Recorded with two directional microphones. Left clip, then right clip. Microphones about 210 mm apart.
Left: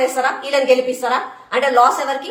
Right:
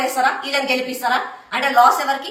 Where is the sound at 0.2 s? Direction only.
15° left (ahead or behind).